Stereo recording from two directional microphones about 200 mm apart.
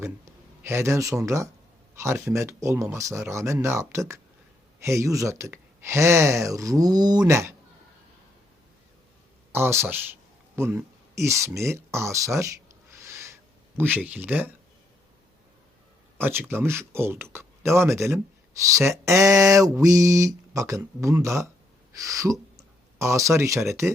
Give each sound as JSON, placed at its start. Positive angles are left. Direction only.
{"t": 0.6, "sound": "mantra", "side_deg": -15}
{"t": 9.5, "sound": "mantra", "side_deg": -10}
{"t": 10.5, "sound": "speech", "side_deg": -10}
{"t": 13.1, "sound": "owl", "side_deg": -15}
{"t": 13.7, "sound": "mantra", "side_deg": -10}
{"t": 16.1, "sound": "speech", "side_deg": -10}
{"t": 18.6, "sound": "mantra", "side_deg": -15}
{"t": 21.9, "sound": "speech", "side_deg": -15}
{"t": 23.6, "sound": "mantra", "side_deg": -15}